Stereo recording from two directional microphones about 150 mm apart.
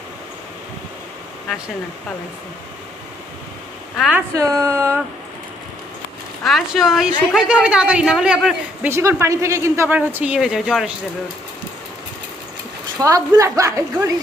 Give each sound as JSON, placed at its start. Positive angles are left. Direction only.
{"t": 3.9, "sound": "speech", "side_deg": 0}
{"t": 4.4, "sound": "speech", "side_deg": -20}
{"t": 6.4, "sound": "speech", "side_deg": 0}
{"t": 8.9, "sound": "speech", "side_deg": -15}
{"t": 13.0, "sound": "speech", "side_deg": -25}